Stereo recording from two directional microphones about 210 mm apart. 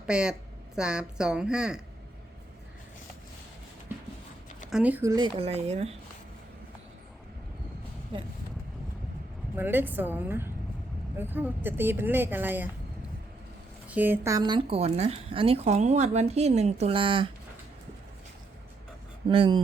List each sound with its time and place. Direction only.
0.0 s a woman's voice: 5° right (ahead or behind)
4.7 s speech: 5° right (ahead or behind); by 6.0 s 30° right (ahead or behind)
8.1 s speech: 25° right (ahead or behind)
9.6 s speech: 10° right (ahead or behind)
13.8 s speech: 10° right (ahead or behind); by 17.2 s 25° right (ahead or behind)
19.3 s speech: 25° right (ahead or behind)